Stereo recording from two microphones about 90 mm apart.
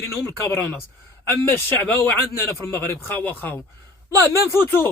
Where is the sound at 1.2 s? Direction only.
25° left (ahead or behind).